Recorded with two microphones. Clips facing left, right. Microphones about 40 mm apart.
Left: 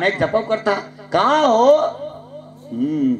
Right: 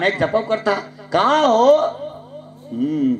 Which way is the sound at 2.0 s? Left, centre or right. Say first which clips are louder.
Even; centre.